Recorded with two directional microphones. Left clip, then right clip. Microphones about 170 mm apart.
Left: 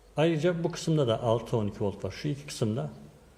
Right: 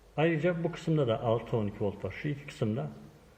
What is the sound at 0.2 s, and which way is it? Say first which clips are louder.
A man's voice: left 2 dB; 20° left (ahead or behind).